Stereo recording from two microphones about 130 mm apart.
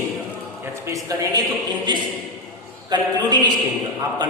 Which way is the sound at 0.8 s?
25° right (ahead or behind).